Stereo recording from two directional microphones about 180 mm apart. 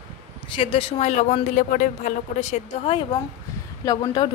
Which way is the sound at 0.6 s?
30° left (ahead or behind).